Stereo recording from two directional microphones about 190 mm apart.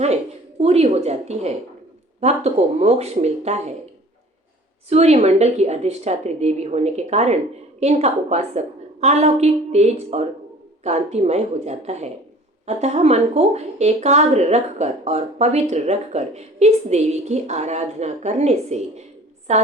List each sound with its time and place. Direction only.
0.6 s speech: 35° right (ahead or behind)
4.9 s speech: 35° right (ahead or behind)